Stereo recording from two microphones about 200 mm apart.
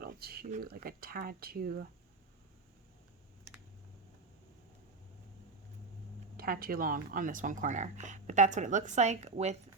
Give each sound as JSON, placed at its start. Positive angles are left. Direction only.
{"t": 0.0, "sound": "a sound", "side_deg": -50}
{"t": 0.5, "sound": "speech", "side_deg": -45}
{"t": 6.3, "sound": "speech", "side_deg": -45}